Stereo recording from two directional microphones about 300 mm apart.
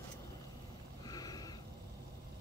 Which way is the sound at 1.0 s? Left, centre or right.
Centre.